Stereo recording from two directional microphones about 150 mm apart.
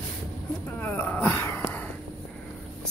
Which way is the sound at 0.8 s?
10° left (ahead or behind).